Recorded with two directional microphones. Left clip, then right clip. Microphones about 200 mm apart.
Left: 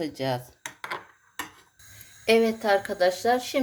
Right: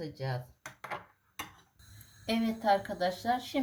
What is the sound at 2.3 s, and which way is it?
Speech, 35° left (ahead or behind).